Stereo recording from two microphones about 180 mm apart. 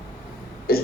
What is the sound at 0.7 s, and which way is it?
Throat clearing, 60° left (ahead or behind).